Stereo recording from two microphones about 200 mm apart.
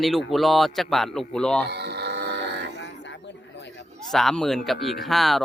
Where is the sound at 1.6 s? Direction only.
55° right (ahead or behind).